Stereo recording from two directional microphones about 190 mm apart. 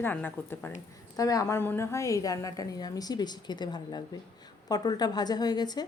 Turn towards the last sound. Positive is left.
turn(degrees=20)  # may be behind; listen again after turning